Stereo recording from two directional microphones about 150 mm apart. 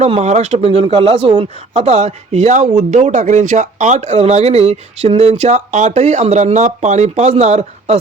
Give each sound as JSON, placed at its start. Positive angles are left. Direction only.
{"t": 0.0, "sound": "speech", "side_deg": -50}